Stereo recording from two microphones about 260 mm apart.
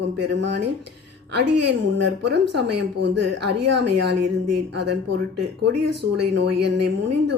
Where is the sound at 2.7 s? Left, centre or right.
Right.